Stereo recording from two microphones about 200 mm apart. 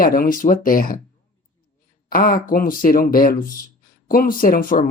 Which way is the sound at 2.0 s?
45° left (ahead or behind).